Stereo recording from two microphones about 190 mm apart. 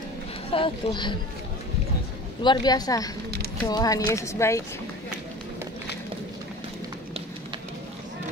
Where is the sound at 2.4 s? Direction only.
20° left (ahead or behind).